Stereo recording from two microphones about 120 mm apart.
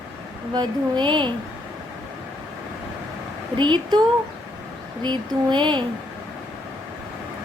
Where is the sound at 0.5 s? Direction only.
40° right (ahead or behind).